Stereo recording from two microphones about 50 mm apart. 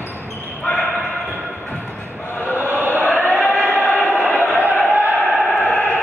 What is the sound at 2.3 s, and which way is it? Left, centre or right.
Chant, left.